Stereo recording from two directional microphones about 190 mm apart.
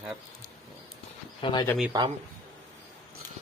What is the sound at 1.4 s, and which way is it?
Speech, 25° left (ahead or behind).